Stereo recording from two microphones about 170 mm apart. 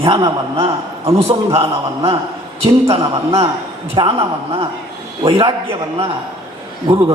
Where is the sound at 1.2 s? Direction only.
35° right (ahead or behind).